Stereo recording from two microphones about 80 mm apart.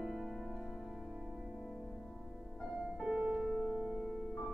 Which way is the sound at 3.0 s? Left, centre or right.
Centre.